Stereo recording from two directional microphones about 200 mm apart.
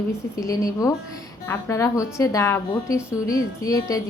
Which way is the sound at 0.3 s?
15° left (ahead or behind).